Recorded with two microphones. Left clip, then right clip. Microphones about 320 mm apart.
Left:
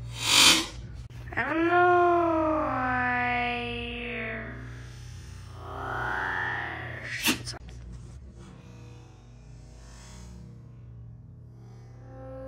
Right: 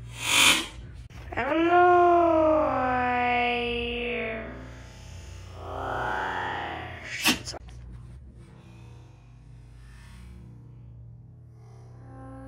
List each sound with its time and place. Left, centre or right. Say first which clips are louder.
0.1 s a sound: left 1 dB; centre
1.3 s music: right 2 dB; centre
12.1 s music: left 3 dB; right